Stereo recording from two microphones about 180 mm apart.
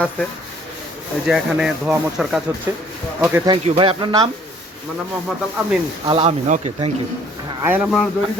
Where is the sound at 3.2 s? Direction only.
15° right (ahead or behind).